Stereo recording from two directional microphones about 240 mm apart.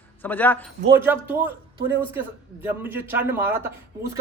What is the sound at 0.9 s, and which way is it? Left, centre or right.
A man's voice, centre.